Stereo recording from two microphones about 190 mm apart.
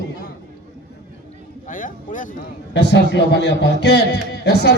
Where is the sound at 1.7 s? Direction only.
45° left (ahead or behind).